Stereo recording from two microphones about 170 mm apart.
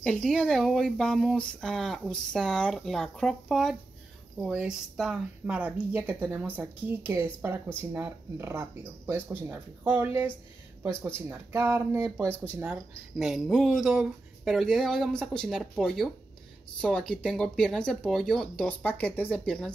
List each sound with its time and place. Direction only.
0.0 s speech: 5° left (ahead or behind)